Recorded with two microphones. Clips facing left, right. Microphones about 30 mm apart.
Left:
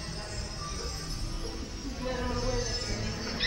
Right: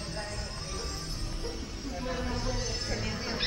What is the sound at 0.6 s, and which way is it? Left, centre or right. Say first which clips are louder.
Music: even; centre.